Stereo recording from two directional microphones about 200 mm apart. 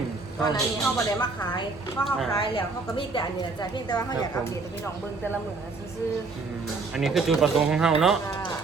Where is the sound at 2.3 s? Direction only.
25° left (ahead or behind).